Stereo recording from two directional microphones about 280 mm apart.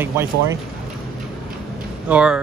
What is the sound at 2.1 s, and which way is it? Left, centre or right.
Speech, centre.